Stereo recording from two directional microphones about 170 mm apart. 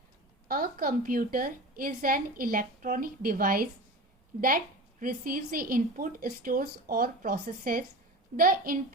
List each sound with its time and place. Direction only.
0.4 s a woman's voice: 60° right (ahead or behind)